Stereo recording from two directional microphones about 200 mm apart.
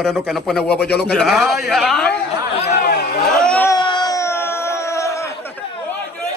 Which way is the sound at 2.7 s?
55° left (ahead or behind).